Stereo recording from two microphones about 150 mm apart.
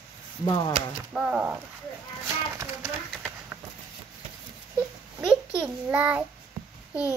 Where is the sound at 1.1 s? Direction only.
10° right (ahead or behind).